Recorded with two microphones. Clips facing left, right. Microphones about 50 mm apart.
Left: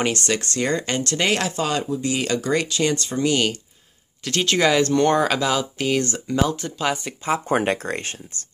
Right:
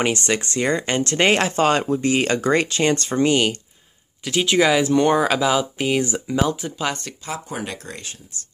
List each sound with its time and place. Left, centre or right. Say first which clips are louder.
0.0 s speech: right 1 dB; centre; by 3.3 s right
3.3 s speech: even; centre
6.9 s speech: left 3 dB; centre
7.4 s speech: left 9 dB; left